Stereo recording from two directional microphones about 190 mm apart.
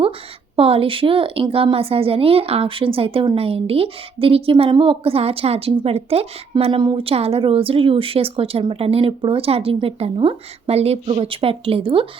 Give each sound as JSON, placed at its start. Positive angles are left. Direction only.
{"t": 0.5, "sound": "a woman's voice", "side_deg": -30}